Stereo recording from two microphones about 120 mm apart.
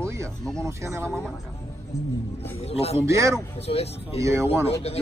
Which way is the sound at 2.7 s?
60° left (ahead or behind).